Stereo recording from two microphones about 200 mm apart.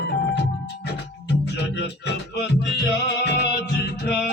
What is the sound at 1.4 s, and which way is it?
Music, 60° left (ahead or behind).